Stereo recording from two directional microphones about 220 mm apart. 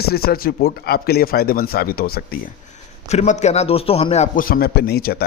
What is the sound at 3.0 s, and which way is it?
A man's voice, 30° left (ahead or behind).